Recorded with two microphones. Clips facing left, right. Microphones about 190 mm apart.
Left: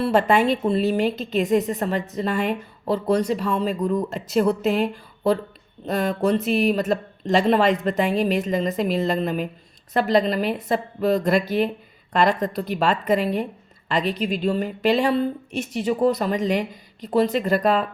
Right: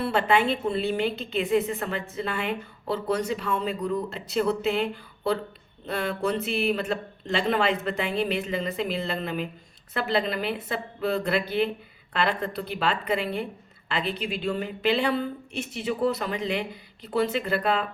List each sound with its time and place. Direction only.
0.0 s a woman's voice: 45° left (ahead or behind)